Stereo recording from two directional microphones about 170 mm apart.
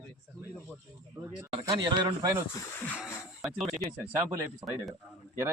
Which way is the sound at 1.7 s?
25° right (ahead or behind).